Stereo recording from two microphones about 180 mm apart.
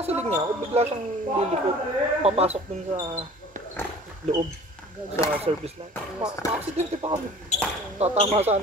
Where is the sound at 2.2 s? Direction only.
35° right (ahead or behind).